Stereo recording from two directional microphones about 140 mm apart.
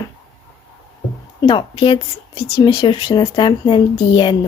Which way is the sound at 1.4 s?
35° left (ahead or behind).